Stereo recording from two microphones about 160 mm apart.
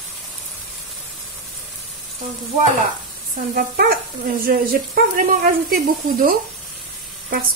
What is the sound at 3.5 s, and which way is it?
Speech, 65° right (ahead or behind).